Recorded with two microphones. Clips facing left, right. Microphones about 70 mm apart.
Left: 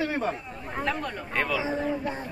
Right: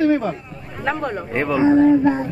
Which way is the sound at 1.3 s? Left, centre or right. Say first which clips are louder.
Right 9 dB; right.